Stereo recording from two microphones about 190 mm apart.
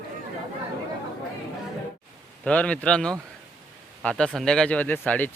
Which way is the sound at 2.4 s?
5° left (ahead or behind).